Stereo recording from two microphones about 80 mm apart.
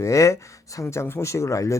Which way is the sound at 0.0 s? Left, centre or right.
Left.